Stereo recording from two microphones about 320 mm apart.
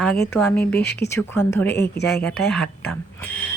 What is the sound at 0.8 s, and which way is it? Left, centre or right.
Speech, left.